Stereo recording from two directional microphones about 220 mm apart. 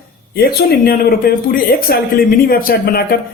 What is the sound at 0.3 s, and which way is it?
Speech, 45° left (ahead or behind).